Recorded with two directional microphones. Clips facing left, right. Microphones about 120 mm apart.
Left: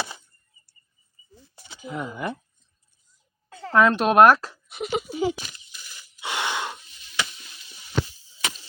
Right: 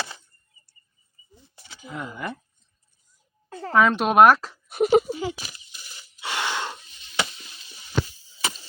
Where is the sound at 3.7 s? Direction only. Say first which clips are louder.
Left 1 dB; centre (ahead or behind).